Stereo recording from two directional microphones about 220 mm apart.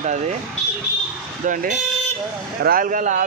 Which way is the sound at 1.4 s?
35° right (ahead or behind).